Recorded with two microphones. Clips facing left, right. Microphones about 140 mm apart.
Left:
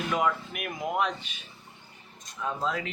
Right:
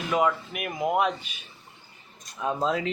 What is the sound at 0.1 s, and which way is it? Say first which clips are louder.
Speech: right 5 dB; 5° right (ahead or behind).